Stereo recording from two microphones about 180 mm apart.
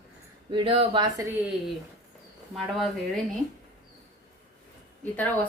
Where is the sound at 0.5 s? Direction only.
30° right (ahead or behind).